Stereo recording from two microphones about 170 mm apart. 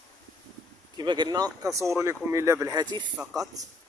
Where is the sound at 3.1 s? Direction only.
Centre (ahead or behind).